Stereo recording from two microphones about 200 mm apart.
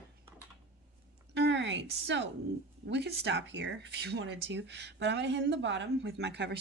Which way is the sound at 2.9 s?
60° right (ahead or behind).